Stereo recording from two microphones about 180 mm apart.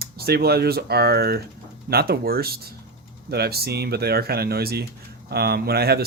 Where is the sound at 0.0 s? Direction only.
60° right (ahead or behind).